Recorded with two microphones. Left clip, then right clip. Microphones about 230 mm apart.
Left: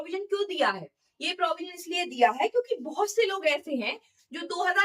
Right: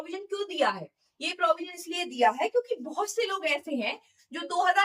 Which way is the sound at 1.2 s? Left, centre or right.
Centre.